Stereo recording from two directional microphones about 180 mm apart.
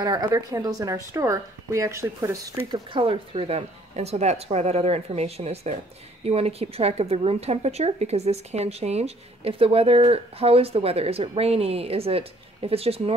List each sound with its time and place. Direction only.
0.0 s a woman's voice: 20° right (ahead or behind)
2.7 s a woman's voice: 30° right (ahead or behind)